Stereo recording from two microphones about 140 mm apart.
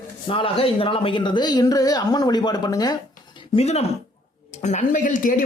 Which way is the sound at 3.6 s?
50° left (ahead or behind).